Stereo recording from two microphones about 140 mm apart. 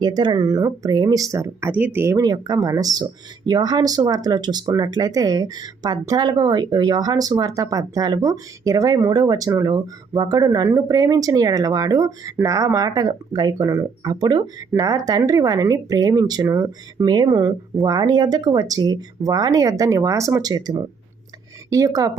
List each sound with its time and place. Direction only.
0.0 s speech: 30° right (ahead or behind)
17.1 s speech: 30° right (ahead or behind)